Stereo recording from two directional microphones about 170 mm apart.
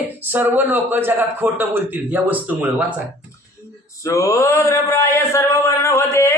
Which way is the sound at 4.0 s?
20° left (ahead or behind).